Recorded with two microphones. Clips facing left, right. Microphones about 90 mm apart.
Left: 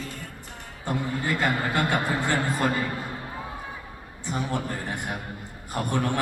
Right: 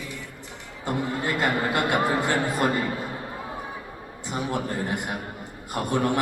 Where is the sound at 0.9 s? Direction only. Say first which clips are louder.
Right 1 dB; 15° right (ahead or behind).